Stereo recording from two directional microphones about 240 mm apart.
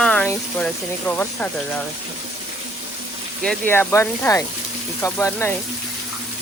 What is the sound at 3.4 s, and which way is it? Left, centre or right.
Speech, centre.